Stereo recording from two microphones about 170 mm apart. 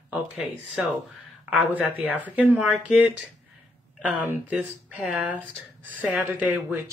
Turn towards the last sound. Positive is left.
turn(degrees=-10)  # may be behind; listen again after turning